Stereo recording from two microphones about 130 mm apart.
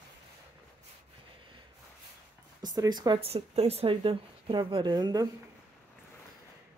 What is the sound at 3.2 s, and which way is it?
Speech, 50° right (ahead or behind).